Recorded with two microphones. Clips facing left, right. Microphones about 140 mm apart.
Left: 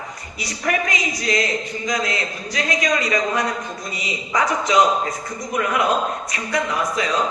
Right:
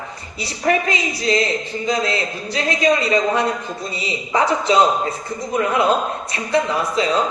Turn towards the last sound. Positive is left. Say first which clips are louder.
# right 3 dB
turn(degrees=-30)  # may be behind; listen again after turning